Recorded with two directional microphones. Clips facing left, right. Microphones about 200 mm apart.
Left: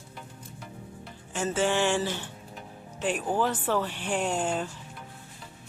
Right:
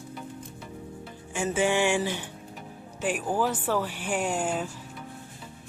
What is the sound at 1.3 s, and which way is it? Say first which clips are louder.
Speech: right 1 dB; 15° right (ahead or behind).